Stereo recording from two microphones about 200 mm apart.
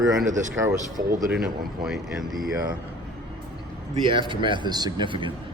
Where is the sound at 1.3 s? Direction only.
Centre (ahead or behind).